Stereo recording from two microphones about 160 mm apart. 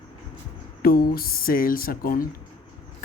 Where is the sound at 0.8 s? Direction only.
70° left (ahead or behind).